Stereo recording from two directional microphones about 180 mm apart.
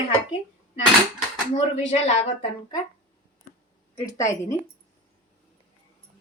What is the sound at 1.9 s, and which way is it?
Speech, 35° left (ahead or behind).